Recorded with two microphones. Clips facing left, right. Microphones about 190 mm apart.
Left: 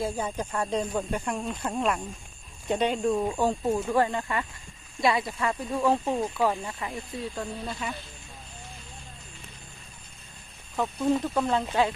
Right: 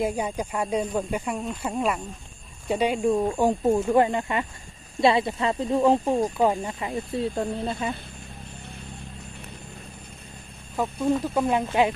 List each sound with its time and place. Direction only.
0.0 s speech: 15° right (ahead or behind)
7.5 s speech: 55° right (ahead or behind)
10.8 s speech: 10° right (ahead or behind)